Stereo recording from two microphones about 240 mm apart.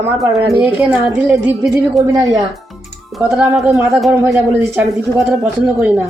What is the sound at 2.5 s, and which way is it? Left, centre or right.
A woman's voice, centre.